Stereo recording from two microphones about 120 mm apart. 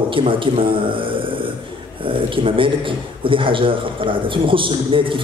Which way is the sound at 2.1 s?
45° right (ahead or behind).